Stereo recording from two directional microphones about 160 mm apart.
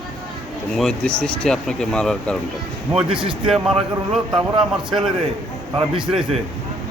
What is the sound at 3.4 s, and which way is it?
Speech, centre (ahead or behind).